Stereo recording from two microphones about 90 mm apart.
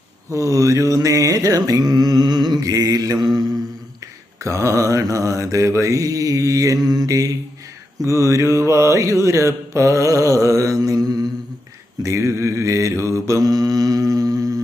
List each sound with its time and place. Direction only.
0.3 s mantra: 35° right (ahead or behind)
4.4 s mantra: 35° right (ahead or behind)
12.0 s mantra: 30° right (ahead or behind)